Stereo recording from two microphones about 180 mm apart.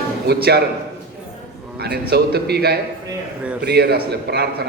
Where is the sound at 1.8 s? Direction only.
60° right (ahead or behind).